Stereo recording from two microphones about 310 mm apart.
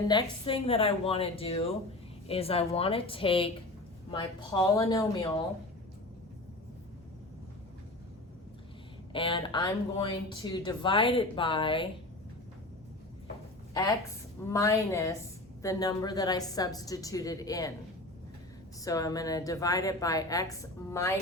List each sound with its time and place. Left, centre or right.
0.1 s a woman's voice: centre
9.1 s speech: centre
14.4 s speech: centre
18.9 s speech: centre